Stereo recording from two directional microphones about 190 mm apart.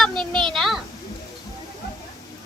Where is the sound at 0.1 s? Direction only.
25° right (ahead or behind).